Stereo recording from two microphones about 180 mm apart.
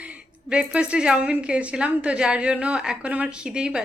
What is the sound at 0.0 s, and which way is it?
Speech, 5° right (ahead or behind).